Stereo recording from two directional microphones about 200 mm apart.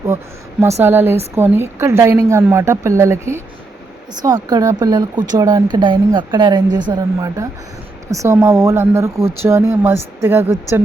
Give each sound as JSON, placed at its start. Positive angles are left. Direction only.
{"t": 0.8, "sound": "speech", "side_deg": -10}
{"t": 4.4, "sound": "speech", "side_deg": -20}